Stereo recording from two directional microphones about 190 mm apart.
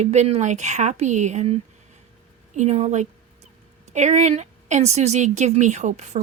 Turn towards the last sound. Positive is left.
turn(degrees=-35)  # may be behind; listen again after turning